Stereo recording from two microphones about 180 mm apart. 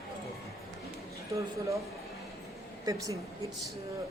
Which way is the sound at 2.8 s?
20° right (ahead or behind).